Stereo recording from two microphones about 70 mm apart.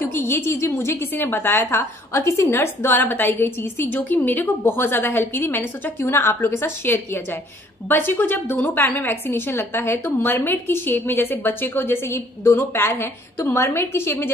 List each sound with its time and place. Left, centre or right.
0.0 s a woman's voice: left